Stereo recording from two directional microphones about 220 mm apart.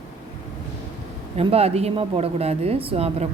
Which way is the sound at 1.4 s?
25° right (ahead or behind).